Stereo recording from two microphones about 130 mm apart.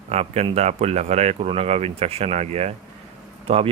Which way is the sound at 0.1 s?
55° right (ahead or behind).